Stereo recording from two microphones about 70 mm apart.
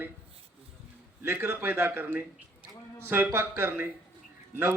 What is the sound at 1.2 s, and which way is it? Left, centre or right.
A man's voice, right.